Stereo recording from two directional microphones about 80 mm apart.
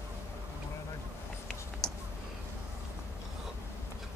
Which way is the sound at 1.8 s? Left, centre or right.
Centre.